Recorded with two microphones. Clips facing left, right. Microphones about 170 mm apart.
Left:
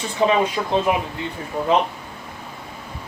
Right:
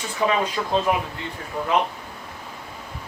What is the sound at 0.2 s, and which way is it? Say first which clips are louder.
Speech: left 4 dB; 25° left (ahead or behind).